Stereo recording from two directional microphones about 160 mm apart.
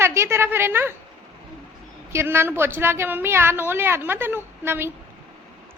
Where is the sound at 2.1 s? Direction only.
15° right (ahead or behind).